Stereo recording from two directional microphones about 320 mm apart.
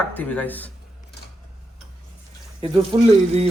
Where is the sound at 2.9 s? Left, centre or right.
Centre.